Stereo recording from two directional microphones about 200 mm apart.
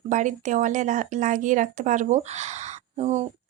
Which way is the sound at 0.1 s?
40° right (ahead or behind).